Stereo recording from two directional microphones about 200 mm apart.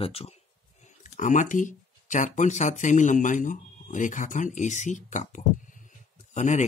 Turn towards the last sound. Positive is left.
turn(degrees=35)  # may be behind; listen again after turning